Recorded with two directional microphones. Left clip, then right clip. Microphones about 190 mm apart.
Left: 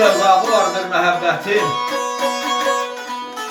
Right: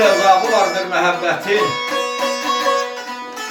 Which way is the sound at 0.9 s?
Centre (ahead or behind).